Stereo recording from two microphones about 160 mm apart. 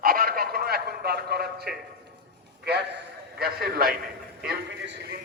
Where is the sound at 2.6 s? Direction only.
90° right.